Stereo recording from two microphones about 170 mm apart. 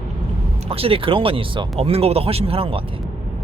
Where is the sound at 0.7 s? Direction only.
35° right (ahead or behind).